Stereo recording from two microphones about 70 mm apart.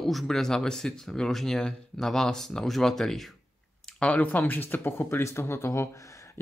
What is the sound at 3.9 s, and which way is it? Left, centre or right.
Speech, centre.